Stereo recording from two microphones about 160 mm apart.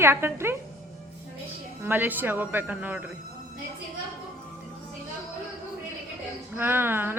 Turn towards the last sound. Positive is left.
turn(degrees=-15)  # may be behind; listen again after turning